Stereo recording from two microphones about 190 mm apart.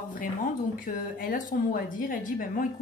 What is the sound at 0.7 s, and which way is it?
A woman's voice, 45° left (ahead or behind).